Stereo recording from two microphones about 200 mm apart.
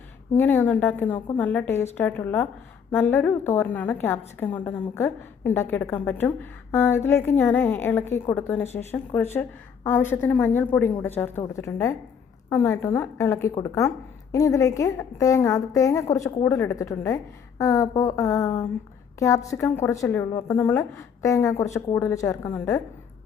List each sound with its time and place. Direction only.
0.3 s a woman's voice: 10° left (ahead or behind)